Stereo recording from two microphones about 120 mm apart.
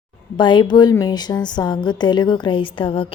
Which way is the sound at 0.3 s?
40° left (ahead or behind).